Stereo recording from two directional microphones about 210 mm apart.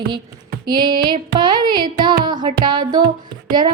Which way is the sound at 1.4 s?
20° right (ahead or behind).